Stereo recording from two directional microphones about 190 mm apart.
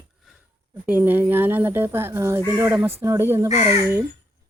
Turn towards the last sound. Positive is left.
turn(degrees=-15)  # may be behind; listen again after turning